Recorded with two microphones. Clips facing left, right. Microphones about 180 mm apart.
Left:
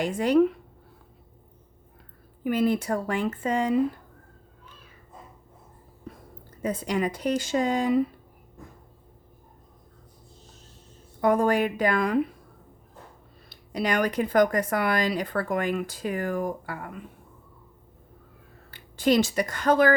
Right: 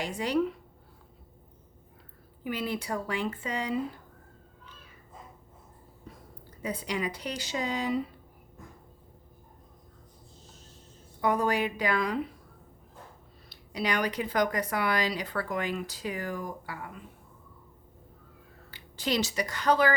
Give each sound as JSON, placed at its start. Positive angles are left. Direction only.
{"t": 0.0, "sound": "speech", "side_deg": 50}
{"t": 2.4, "sound": "speech", "side_deg": 50}
{"t": 6.1, "sound": "a sound", "side_deg": 55}
{"t": 6.6, "sound": "speech", "side_deg": 45}
{"t": 11.2, "sound": "speech", "side_deg": 50}
{"t": 13.5, "sound": "speech", "side_deg": 50}
{"t": 18.7, "sound": "speech", "side_deg": 50}